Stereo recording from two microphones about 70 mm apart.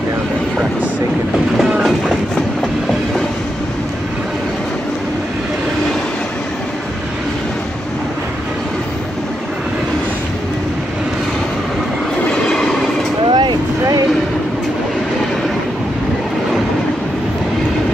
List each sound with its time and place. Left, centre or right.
12.3 s train: centre
13.3 s vehicle: right